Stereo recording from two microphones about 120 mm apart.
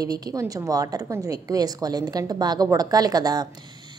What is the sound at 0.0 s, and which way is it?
A woman's voice, 30° right (ahead or behind).